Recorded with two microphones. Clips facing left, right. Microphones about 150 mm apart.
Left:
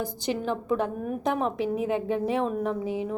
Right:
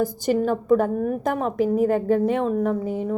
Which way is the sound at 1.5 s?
40° right (ahead or behind).